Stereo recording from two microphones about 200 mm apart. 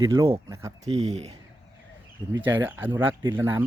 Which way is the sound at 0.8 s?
35° right (ahead or behind).